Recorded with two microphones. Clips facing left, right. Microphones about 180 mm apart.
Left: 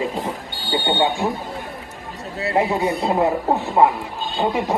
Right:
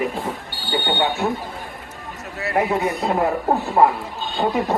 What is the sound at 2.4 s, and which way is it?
Speech, 25° left (ahead or behind).